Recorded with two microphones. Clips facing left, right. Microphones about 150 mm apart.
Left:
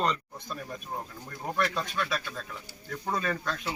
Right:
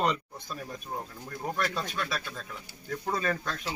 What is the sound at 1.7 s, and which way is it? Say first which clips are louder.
A man's voice: left 2 dB; 5° right (ahead or behind).